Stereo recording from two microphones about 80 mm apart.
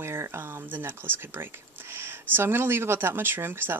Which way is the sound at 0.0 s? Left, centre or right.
Right.